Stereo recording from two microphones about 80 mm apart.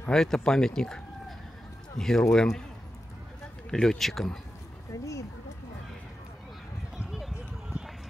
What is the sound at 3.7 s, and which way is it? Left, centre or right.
Speech, centre.